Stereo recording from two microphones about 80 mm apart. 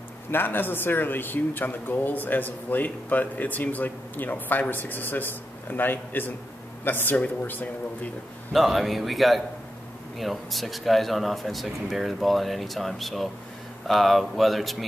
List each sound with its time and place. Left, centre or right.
0.3 s speech: left
8.5 s speech: centre